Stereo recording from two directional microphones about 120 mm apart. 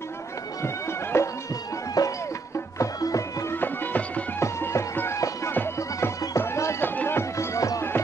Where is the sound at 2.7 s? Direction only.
25° left (ahead or behind).